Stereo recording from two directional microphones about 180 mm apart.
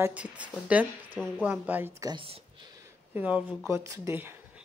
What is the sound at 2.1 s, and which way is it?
Speech, 30° right (ahead or behind).